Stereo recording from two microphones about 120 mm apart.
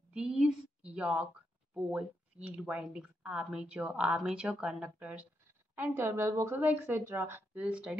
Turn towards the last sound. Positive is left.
turn(degrees=-10)  # may be behind; listen again after turning